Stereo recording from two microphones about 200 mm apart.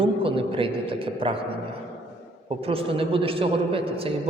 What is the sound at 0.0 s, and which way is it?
A man's voice, 25° right (ahead or behind).